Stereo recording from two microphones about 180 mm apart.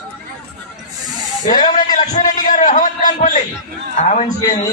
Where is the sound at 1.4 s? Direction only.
45° left (ahead or behind).